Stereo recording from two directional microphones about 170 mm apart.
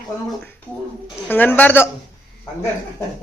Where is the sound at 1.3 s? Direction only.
10° left (ahead or behind).